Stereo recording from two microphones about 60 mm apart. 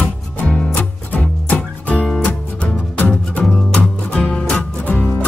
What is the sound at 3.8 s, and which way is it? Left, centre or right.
Music, left.